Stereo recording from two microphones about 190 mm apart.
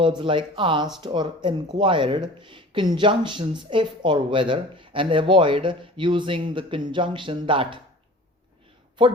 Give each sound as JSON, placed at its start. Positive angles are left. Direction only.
{"t": 0.2, "sound": "speech", "side_deg": -25}
{"t": 9.0, "sound": "speech", "side_deg": -25}